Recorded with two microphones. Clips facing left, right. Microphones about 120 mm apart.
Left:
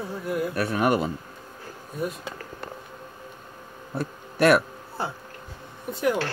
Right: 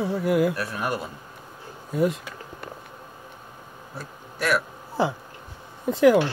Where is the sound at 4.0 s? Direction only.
60° left (ahead or behind).